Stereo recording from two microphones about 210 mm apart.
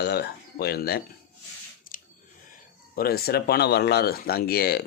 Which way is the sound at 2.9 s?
45° left (ahead or behind).